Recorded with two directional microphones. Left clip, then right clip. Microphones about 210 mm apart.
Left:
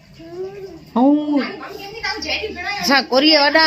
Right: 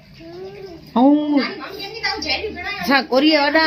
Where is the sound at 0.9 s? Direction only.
Centre (ahead or behind).